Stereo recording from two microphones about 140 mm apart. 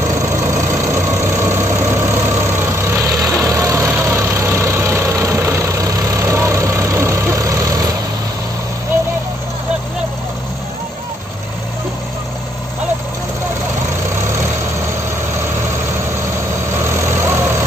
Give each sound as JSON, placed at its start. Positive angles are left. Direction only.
{"t": 0.5, "sound": "vehicle", "side_deg": -20}
{"t": 16.8, "sound": "vehicle", "side_deg": -20}